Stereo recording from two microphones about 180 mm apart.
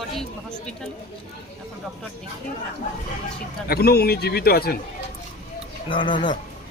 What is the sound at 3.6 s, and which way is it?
A man's voice, 60° left (ahead or behind).